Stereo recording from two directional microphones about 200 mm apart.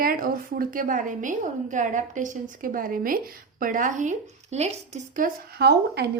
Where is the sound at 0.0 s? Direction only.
45° right (ahead or behind).